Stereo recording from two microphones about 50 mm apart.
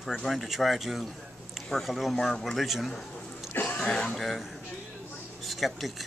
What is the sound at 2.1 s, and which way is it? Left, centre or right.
Speech, centre.